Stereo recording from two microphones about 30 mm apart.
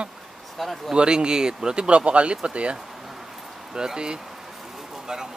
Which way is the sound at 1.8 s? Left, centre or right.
Right.